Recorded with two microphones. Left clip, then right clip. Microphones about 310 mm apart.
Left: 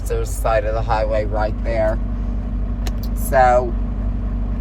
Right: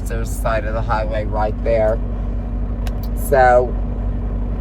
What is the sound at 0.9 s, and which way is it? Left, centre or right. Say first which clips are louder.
Speech: left 2 dB; centre.